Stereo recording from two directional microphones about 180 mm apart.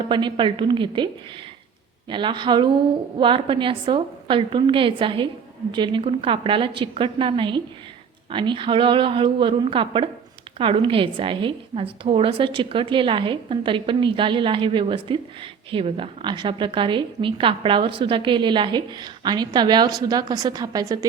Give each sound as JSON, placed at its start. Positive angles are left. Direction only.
{"t": 0.1, "sound": "a woman's voice", "side_deg": -25}
{"t": 2.0, "sound": "a woman's voice", "side_deg": -25}